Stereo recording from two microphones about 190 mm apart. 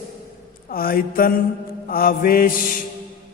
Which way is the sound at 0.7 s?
50° left (ahead or behind).